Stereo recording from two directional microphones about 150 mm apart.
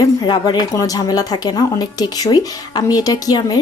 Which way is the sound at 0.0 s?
25° left (ahead or behind).